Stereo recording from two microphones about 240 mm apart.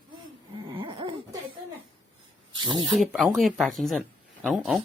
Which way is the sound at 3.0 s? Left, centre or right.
Centre.